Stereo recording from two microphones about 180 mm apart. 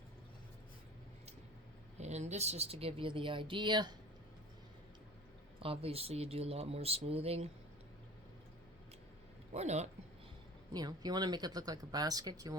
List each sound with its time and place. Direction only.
2.0 s speech: 40° right (ahead or behind)
5.5 s speech: 30° right (ahead or behind)
9.5 s speech: 40° right (ahead or behind)
10.7 s speech: 20° right (ahead or behind)